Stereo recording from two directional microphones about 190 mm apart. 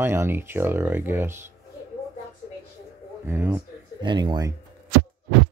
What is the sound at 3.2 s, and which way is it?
Speech, 10° right (ahead or behind).